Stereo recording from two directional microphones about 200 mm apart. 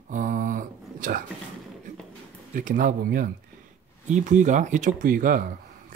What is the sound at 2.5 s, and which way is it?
Speech, 40° right (ahead or behind).